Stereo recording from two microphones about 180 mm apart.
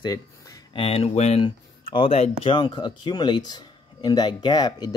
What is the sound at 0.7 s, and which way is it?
Speech, 35° left (ahead or behind).